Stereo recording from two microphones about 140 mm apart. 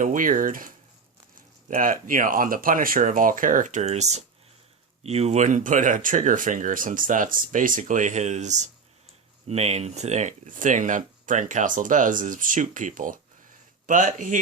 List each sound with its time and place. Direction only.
0.0 s speech: 70° right (ahead or behind)